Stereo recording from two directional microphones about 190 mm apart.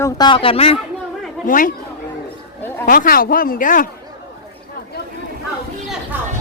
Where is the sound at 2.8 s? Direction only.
45° left (ahead or behind).